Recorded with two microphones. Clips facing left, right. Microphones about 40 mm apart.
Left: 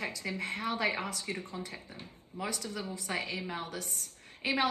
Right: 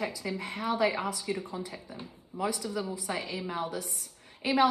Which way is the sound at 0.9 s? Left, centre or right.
Centre.